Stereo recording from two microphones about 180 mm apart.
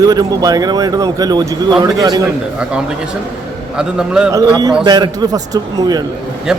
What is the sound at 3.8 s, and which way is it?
Speech, 5° right (ahead or behind).